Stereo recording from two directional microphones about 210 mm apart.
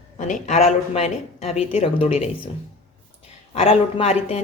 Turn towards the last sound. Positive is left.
turn(degrees=30)  # may be behind; listen again after turning